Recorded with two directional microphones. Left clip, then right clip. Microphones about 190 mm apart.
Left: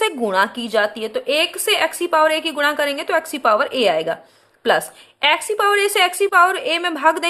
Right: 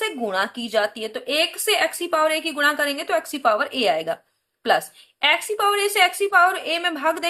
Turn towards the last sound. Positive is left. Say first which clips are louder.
# left 5 dB
turn(degrees=35)  # may be behind; listen again after turning